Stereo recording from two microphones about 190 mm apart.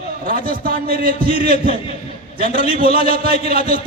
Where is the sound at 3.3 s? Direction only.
35° left (ahead or behind).